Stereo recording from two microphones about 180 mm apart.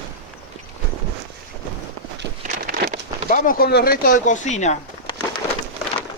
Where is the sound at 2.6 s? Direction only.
50° right (ahead or behind).